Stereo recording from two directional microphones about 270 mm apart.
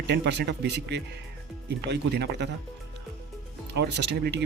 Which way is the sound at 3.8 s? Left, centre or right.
Right.